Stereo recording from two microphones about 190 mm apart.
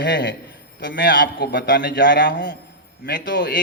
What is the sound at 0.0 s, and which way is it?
A man's voice, 65° left (ahead or behind).